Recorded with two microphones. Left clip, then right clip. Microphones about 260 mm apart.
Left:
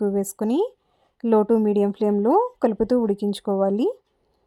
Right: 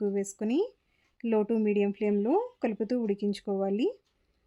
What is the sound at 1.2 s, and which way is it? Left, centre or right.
Speech, left.